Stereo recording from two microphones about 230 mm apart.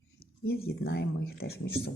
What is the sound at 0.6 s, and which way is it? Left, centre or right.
Speech, left.